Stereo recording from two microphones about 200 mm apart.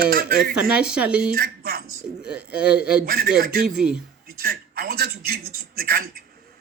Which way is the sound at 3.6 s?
5° right (ahead or behind).